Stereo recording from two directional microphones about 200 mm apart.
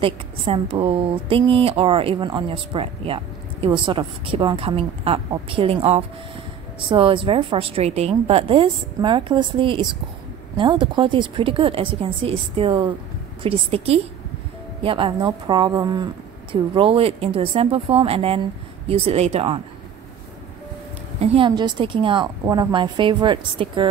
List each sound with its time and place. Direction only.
0.0 s a woman's voice: 25° right (ahead or behind)
21.2 s a woman's voice: 30° right (ahead or behind)